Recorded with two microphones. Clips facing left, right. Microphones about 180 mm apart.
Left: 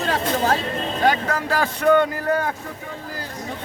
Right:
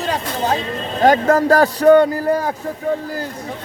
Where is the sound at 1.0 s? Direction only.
45° right (ahead or behind).